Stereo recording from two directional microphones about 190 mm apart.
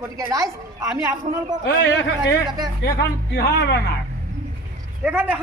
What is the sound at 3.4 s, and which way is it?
Speech, 60° left (ahead or behind).